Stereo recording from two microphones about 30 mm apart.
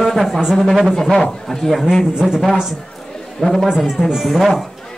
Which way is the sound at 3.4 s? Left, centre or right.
Centre.